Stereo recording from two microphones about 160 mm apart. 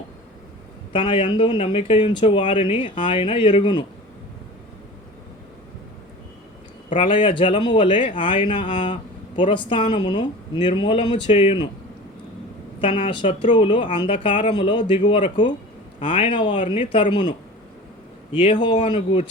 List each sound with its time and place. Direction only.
0.9 s speech: 35° left (ahead or behind)
6.9 s speech: 35° left (ahead or behind)
12.8 s speech: 35° left (ahead or behind)